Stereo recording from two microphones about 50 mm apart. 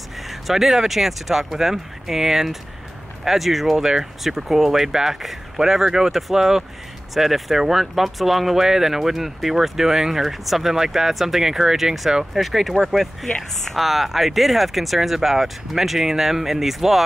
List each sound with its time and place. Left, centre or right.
0.3 s speech: centre